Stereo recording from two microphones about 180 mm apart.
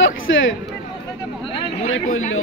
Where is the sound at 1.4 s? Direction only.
30° left (ahead or behind).